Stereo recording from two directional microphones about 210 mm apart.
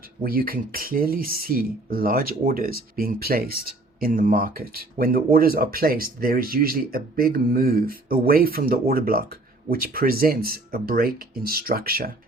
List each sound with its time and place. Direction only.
0.2 s speech: 45° right (ahead or behind)